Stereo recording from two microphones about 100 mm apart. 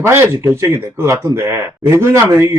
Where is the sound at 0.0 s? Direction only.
25° right (ahead or behind).